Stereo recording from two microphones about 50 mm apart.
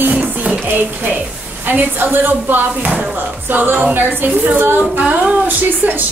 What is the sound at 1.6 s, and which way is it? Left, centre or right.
Speech, right.